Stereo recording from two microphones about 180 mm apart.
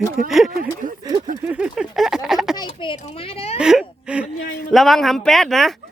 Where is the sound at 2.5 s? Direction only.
25° left (ahead or behind).